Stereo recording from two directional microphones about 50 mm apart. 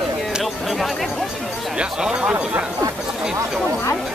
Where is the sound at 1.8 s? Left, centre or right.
Centre.